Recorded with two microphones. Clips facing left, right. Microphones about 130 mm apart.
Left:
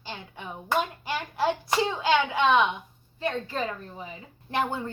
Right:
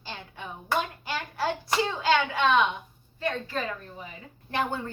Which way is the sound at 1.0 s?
20° left (ahead or behind).